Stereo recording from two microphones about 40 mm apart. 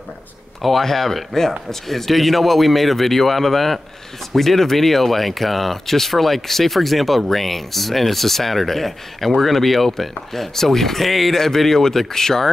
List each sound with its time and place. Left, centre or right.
0.6 s speech: centre